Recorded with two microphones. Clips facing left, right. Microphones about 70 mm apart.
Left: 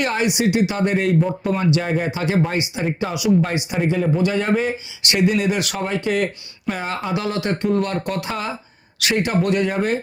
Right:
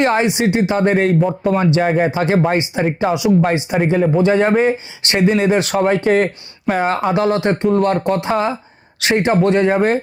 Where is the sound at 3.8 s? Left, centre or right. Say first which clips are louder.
Right 5 dB; right.